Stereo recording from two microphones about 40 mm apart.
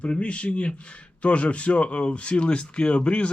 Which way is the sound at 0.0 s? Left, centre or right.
Left.